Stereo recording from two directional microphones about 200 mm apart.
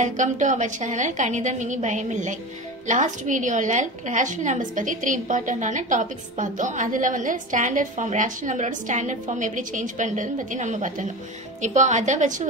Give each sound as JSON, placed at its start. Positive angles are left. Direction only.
{"t": 0.0, "sound": "a woman's voice", "side_deg": -40}